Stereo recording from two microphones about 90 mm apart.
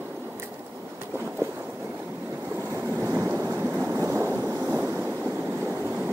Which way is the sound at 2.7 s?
35° right (ahead or behind).